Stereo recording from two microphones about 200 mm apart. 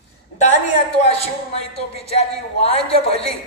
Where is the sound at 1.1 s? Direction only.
30° left (ahead or behind).